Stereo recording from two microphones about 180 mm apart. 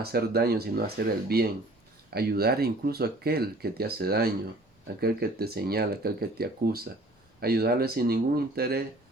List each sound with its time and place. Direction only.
0.0 s speech: 60° right (ahead or behind)